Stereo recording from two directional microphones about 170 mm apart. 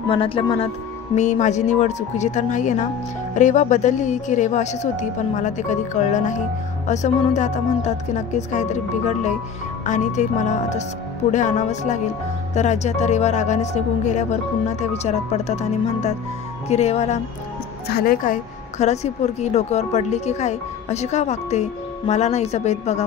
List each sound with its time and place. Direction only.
0.1 s speech: 30° left (ahead or behind)
1.1 s a woman's voice: 45° left (ahead or behind)
17.8 s speech: 60° left (ahead or behind); by 23.0 s 40° left (ahead or behind)